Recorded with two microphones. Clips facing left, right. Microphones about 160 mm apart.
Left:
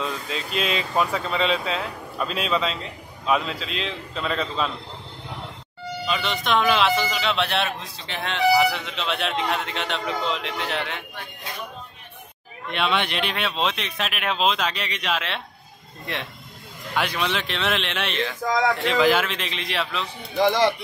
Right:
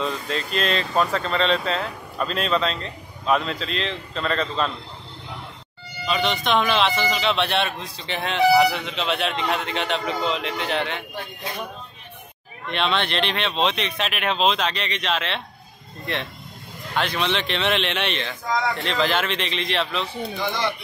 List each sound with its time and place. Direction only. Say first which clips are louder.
0.0 s speech: right 3 dB; 5° left (ahead or behind)
6.0 s speech: right 3 dB; centre (ahead or behind)
12.7 s speech: right 1 dB; 10° left (ahead or behind)
16.9 s speech: right 1 dB; 10° left (ahead or behind)
20.4 s speech: left 7 dB; 90° left